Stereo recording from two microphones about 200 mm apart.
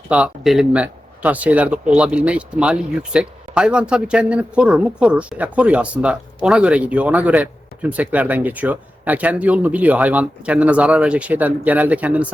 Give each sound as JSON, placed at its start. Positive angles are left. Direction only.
{"t": 0.1, "sound": "speech", "side_deg": -5}